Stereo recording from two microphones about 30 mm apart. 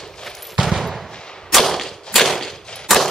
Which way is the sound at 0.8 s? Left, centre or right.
Centre.